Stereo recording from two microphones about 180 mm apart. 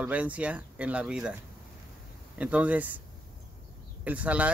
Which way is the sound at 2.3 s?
5° right (ahead or behind).